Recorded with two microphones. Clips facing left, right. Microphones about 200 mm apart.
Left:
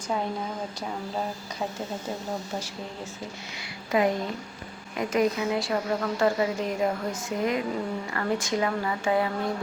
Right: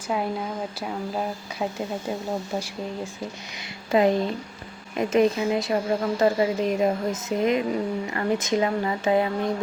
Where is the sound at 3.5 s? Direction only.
25° right (ahead or behind).